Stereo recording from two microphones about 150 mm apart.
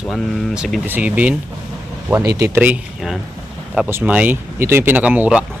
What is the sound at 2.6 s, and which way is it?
Speech, 5° right (ahead or behind).